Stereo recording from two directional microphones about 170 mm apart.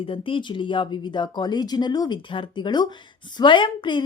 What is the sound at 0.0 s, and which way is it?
A woman's voice, 30° left (ahead or behind).